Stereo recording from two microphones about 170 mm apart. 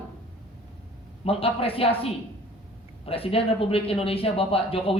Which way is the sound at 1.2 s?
35° left (ahead or behind).